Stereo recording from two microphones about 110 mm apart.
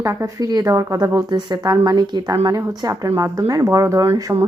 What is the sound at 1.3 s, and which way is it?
Speech, 40° right (ahead or behind).